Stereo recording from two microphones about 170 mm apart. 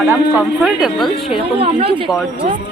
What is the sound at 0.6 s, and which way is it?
Music, centre (ahead or behind).